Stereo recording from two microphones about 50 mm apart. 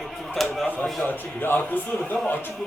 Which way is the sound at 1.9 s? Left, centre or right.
Left.